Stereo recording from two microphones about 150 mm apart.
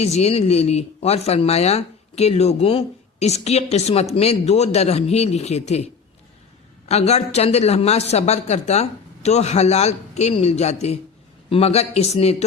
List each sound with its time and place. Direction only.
0.0 s a man's voice: 45° left (ahead or behind)